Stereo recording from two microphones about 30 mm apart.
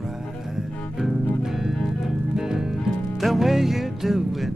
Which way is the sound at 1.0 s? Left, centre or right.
Centre.